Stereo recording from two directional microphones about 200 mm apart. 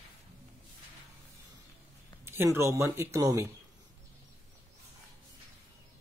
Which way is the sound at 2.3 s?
10° right (ahead or behind).